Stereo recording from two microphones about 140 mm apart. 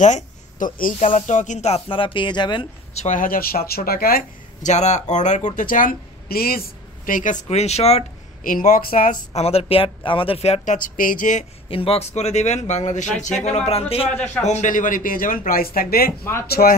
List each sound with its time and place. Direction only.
0.0 s speech: 65° left (ahead or behind)
0.9 s speech: 55° left (ahead or behind); by 2.7 s 35° left (ahead or behind)
2.9 s speech: 50° left (ahead or behind)
3.2 s speech: 90° left
4.6 s speech: 55° left (ahead or behind); by 6.6 s 90° left
7.1 s speech: 75° left (ahead or behind)
7.4 s speech: 50° left (ahead or behind)
8.5 s speech: 75° left (ahead or behind)
9.4 s speech: 45° left (ahead or behind); by 11.4 s 70° left (ahead or behind)
11.7 s speech: 40° left (ahead or behind)
13.7 s speech: 45° left (ahead or behind)
14.4 s speech: 55° left (ahead or behind); by 16.7 s 90° left